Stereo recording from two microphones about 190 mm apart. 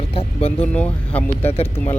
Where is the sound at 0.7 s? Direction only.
5° left (ahead or behind).